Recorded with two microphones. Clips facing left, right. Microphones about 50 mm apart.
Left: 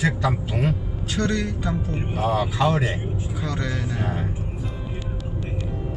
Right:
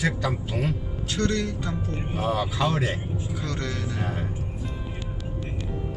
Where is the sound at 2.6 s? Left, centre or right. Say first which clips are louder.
Left 4 dB; centre.